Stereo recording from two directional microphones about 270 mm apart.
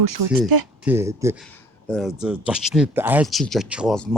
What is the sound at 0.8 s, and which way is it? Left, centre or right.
Speech, centre.